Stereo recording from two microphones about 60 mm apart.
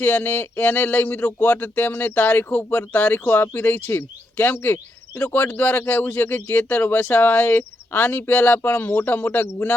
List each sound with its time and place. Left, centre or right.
0.0 s speech: left